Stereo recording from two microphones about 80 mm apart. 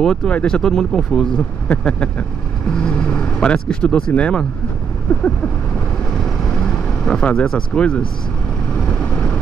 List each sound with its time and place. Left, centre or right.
0.0 s speech: centre
6.1 s vehicle: centre